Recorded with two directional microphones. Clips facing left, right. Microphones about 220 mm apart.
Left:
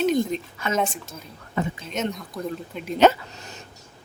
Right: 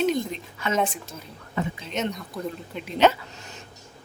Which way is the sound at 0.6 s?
45° left (ahead or behind).